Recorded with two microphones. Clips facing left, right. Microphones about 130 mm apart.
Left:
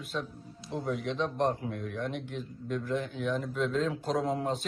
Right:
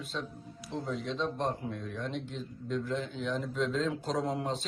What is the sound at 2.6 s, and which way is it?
Speech, 5° left (ahead or behind).